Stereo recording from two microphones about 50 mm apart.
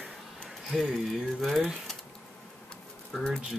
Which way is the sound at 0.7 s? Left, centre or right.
Centre.